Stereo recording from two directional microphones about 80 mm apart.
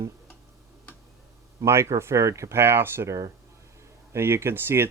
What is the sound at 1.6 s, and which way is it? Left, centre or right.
Speech, right.